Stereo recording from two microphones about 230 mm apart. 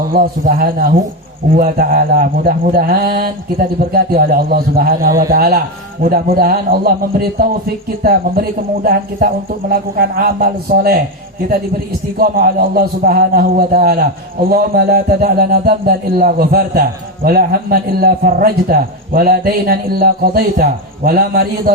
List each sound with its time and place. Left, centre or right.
0.1 s a man's voice: right
12.1 s a man's voice: right